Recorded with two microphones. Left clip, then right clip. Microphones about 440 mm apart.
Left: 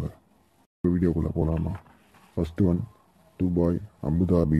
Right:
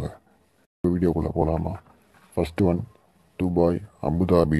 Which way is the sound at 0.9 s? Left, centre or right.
Right.